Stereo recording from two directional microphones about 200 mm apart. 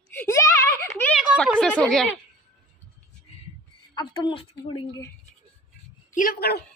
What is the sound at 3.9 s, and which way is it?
A woman's voice, 25° left (ahead or behind).